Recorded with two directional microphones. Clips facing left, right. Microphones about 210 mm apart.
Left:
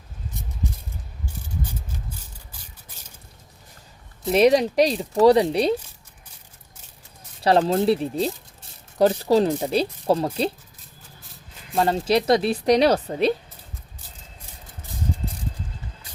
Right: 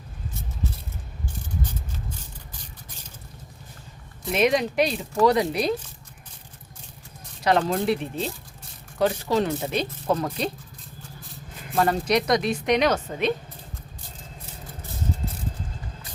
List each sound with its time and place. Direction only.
4.3 s a woman's voice: 35° left (ahead or behind)
7.4 s a woman's voice: 30° left (ahead or behind)
11.8 s a woman's voice: 25° left (ahead or behind)